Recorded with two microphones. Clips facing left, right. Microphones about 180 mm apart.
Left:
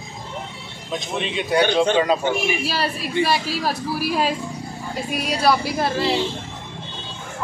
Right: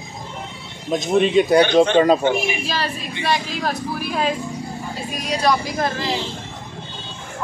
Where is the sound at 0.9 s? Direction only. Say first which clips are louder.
Right 10 dB; 45° right (ahead or behind).